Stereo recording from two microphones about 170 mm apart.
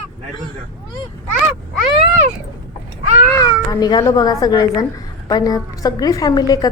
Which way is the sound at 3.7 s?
25° left (ahead or behind).